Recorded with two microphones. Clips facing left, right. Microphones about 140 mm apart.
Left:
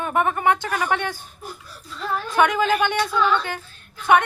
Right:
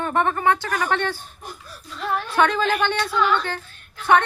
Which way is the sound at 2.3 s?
15° left (ahead or behind).